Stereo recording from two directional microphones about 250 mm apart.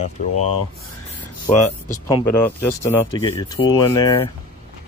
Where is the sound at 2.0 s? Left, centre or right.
Centre.